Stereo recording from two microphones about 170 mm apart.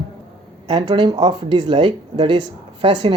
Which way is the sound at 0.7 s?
25° right (ahead or behind).